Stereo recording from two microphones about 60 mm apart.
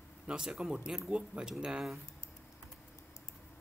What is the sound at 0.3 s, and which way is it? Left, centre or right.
Speech, centre.